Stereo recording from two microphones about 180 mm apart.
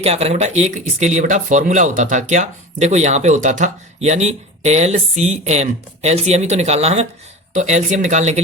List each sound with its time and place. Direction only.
0.0 s speech: 35° right (ahead or behind)